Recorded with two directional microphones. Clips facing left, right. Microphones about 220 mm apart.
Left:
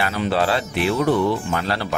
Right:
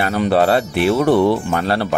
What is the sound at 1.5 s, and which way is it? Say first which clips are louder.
Speech: right 5 dB; 55° right (ahead or behind).